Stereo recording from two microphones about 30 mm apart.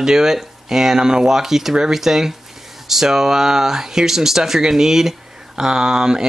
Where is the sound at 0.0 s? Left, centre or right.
Centre.